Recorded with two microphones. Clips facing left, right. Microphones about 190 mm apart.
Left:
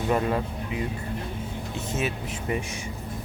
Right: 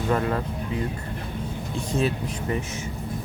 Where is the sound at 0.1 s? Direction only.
15° left (ahead or behind).